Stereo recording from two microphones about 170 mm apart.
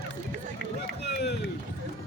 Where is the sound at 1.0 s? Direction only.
80° left.